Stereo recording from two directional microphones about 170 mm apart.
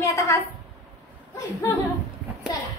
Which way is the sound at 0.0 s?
20° left (ahead or behind).